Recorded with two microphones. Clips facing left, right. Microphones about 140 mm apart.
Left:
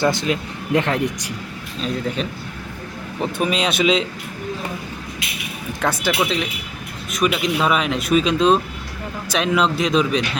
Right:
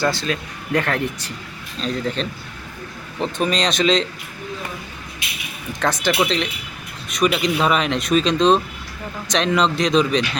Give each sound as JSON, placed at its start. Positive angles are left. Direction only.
{"t": 0.0, "sound": "speech", "side_deg": 20}
{"t": 5.8, "sound": "speech", "side_deg": 10}